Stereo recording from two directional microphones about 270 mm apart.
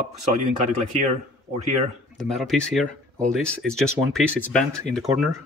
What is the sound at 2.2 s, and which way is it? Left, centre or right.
Speech, centre.